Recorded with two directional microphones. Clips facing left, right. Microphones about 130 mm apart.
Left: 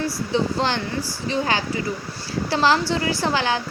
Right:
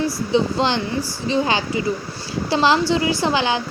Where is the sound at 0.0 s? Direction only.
20° right (ahead or behind).